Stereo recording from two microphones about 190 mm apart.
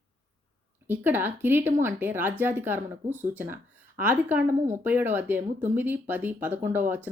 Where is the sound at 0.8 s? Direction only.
10° right (ahead or behind).